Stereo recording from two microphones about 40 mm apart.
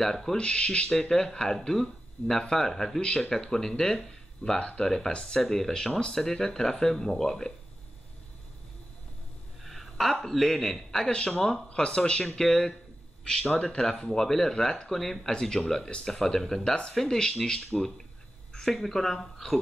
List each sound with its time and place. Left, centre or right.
0.0 s speech: centre
0.4 s a man's voice: left
1.1 s speech: centre
3.0 s speech: centre
4.6 s a man's voice: left
4.8 s speech: centre
9.7 s a sound: centre
10.2 s speech: centre
11.1 s a man's voice: left
12.4 s a man's voice: centre
13.8 s speech: centre
15.8 s a man's voice: left
16.1 s speech: centre